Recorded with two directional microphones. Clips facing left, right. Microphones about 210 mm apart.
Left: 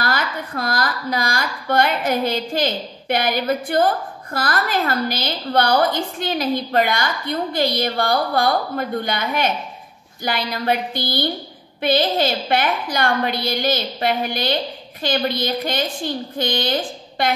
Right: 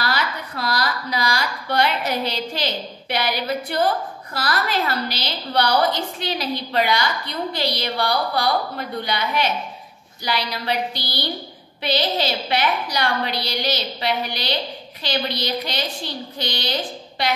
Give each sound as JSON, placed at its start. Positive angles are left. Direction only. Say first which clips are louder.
{"t": 0.0, "sound": "a woman's voice", "louder": "left 2 dB", "side_deg": 50}